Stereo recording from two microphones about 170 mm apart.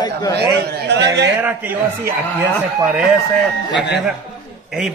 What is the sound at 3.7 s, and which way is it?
Speech, 90° left.